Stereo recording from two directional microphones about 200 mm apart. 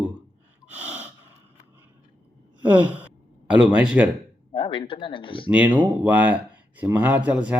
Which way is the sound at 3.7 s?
5° right (ahead or behind).